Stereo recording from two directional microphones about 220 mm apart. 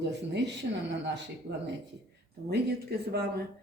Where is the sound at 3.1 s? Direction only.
45° right (ahead or behind).